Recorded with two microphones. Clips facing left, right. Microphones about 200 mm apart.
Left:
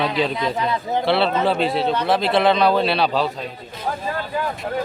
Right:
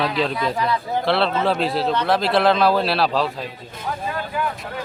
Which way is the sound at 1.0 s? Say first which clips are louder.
Left 1 dB; centre (ahead or behind).